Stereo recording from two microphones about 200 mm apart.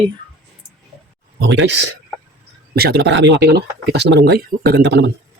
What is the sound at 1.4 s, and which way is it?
Speech, 60° right (ahead or behind).